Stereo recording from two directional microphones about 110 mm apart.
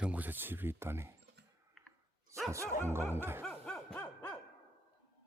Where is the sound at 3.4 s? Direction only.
5° left (ahead or behind).